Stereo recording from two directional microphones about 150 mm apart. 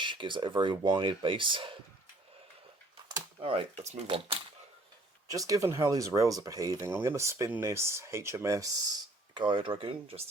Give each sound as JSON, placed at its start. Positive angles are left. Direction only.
{"t": 0.0, "sound": "speech", "side_deg": -30}
{"t": 3.4, "sound": "speech", "side_deg": -40}
{"t": 5.3, "sound": "speech", "side_deg": -25}
{"t": 9.3, "sound": "speech", "side_deg": -30}